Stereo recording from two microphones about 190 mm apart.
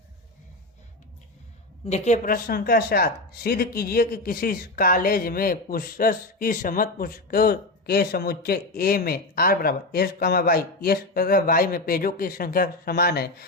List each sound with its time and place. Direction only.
1.8 s speech: 35° left (ahead or behind); by 13.2 s 55° left (ahead or behind)